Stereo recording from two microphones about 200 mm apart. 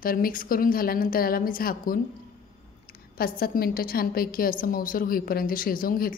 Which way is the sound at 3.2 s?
50° left (ahead or behind).